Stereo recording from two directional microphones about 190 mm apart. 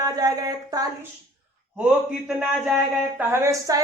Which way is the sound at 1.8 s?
Centre (ahead or behind).